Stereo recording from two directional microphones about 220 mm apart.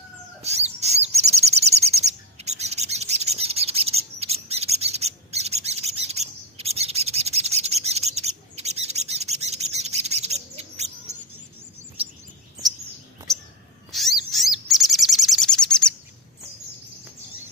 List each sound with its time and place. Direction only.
0.4 s bird: 30° right (ahead or behind)
13.9 s chirp: centre (ahead or behind)